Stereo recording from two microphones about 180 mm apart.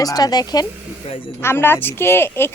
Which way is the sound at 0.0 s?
20° left (ahead or behind).